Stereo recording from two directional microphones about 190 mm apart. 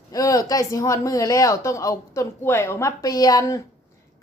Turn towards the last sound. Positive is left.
turn(degrees=15)  # may be behind; listen again after turning